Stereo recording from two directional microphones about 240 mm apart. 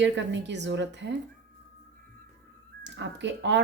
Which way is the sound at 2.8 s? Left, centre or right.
Right.